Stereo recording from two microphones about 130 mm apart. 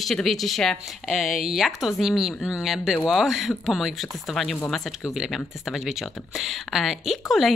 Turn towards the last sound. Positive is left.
turn(degrees=0)  # may be behind; listen again after turning